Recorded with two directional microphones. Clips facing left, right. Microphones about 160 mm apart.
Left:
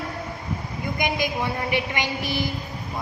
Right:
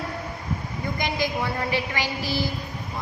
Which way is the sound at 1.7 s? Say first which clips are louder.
Left 1 dB; 20° left (ahead or behind).